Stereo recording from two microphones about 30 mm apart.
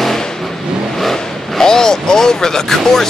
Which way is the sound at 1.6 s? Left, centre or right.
Centre.